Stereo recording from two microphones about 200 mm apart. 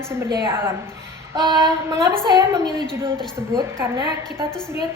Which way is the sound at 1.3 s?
20° right (ahead or behind).